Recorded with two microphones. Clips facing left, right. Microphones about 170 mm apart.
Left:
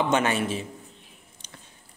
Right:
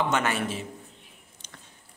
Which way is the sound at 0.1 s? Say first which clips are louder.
Left 3 dB; 20° left (ahead or behind).